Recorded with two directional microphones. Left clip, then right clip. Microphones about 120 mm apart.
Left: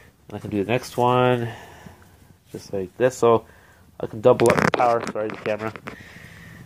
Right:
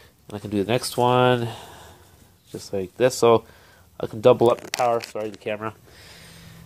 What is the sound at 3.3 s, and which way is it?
Speech, 30° right (ahead or behind).